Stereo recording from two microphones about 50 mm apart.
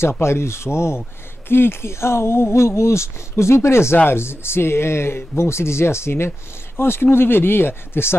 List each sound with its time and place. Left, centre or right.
0.2 s speech: left